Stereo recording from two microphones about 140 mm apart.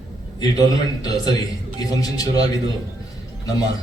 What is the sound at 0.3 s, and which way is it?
A man's voice, 25° left (ahead or behind).